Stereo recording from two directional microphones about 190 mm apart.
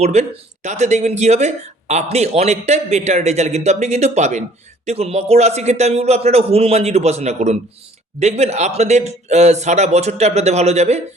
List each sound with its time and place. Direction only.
0.0 s speech: 35° right (ahead or behind)